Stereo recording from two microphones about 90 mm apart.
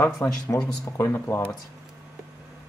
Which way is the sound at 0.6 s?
45° left (ahead or behind).